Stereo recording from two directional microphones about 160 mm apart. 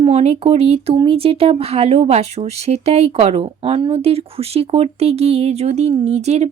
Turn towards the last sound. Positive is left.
turn(degrees=-45)  # may be behind; listen again after turning